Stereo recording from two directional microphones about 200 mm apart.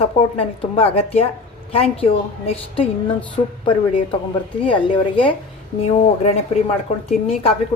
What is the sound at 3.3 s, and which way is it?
A woman's voice, 25° left (ahead or behind).